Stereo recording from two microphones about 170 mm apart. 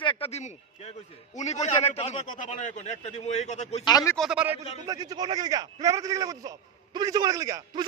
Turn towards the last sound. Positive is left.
turn(degrees=-20)  # may be behind; listen again after turning